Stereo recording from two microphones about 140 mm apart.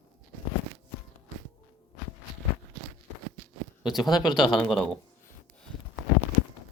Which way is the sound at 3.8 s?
Centre (ahead or behind).